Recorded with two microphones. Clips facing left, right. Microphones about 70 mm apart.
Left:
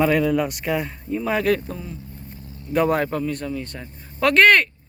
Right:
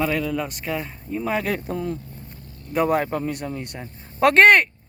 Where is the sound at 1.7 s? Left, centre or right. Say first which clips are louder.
Right 8 dB; right.